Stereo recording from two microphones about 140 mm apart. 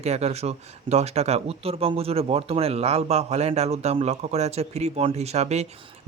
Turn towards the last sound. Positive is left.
turn(degrees=-50)  # may be behind; listen again after turning